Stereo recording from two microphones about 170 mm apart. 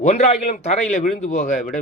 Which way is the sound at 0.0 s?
45° left (ahead or behind).